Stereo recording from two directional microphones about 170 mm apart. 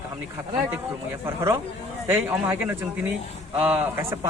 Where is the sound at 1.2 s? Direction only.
15° right (ahead or behind).